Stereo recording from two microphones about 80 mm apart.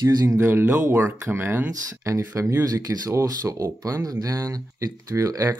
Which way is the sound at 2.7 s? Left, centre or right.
Right.